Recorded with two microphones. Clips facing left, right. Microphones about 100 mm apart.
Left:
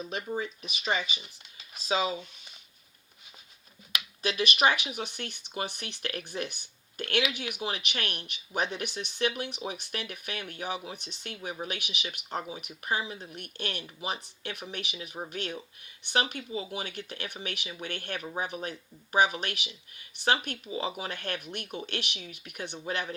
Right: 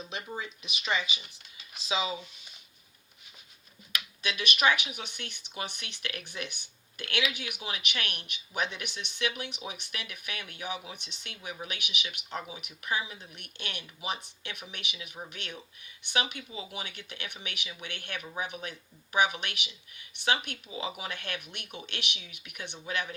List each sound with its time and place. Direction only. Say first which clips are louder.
0.0 s speech: left 5 dB; 45° left (ahead or behind)
4.2 s speech: left 3 dB; 35° left (ahead or behind)